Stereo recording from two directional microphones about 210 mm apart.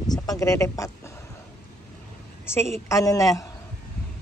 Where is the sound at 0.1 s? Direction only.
15° left (ahead or behind).